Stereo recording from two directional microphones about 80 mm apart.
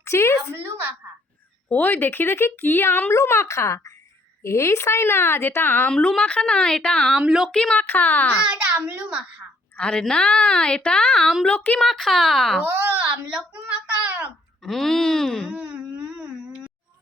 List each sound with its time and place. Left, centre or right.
0.0 s speech: left
0.5 s a woman's voice: right
1.7 s a woman's voice: left
7.2 s a child's voice: centre
7.5 s speech: centre
8.4 s a child's voice: centre
9.7 s a woman's voice: centre
11.8 s speech: centre
13.2 s a sound: centre
14.6 s speech: centre
15.5 s a sound: centre